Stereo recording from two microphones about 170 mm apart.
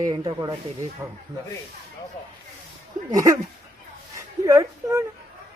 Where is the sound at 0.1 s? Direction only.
25° right (ahead or behind).